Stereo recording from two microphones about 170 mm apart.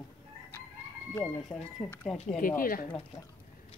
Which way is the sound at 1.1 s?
10° left (ahead or behind).